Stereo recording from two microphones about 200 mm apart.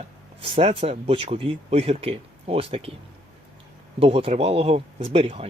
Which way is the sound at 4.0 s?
30° right (ahead or behind).